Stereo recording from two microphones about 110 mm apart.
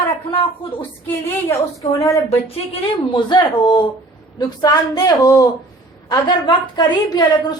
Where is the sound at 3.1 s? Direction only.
45° left (ahead or behind).